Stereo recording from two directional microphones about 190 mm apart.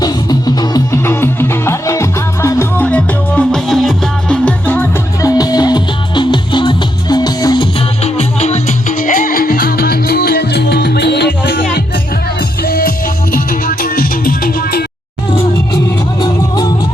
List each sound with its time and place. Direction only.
0.0 s music: 20° left (ahead or behind)
8.2 s music: 35° left (ahead or behind); by 11.5 s 60° left (ahead or behind)
12.6 s music: 50° left (ahead or behind)
16.2 s music: 20° left (ahead or behind)